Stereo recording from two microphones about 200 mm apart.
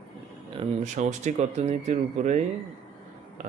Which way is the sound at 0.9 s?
35° right (ahead or behind).